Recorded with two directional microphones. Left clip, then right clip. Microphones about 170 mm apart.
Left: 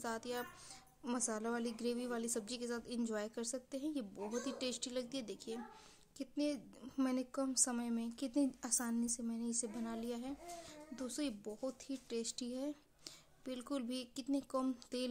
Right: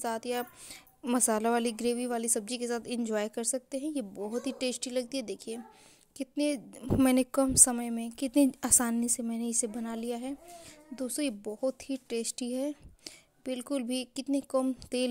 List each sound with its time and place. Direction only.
0.0 s a woman's voice: 35° right (ahead or behind)
8.4 s a woman's voice: 50° right (ahead or behind); by 15.0 s 30° right (ahead or behind)